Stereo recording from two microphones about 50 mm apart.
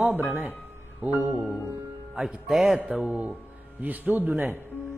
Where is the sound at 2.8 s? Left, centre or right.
Centre.